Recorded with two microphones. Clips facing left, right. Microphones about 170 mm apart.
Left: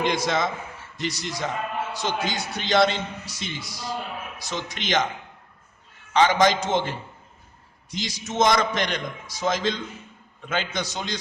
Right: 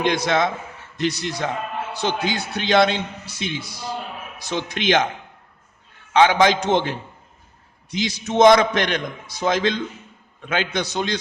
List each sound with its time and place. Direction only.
0.0 s a man's voice: 65° right (ahead or behind)
6.1 s a man's voice: 65° right (ahead or behind)